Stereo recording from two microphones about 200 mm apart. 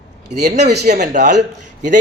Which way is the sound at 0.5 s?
55° right (ahead or behind).